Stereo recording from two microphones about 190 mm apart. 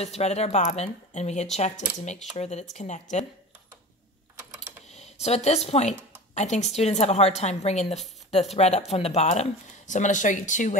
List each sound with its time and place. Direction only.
0.0 s a woman's voice: 35° left (ahead or behind)
4.9 s a woman's voice: 35° left (ahead or behind)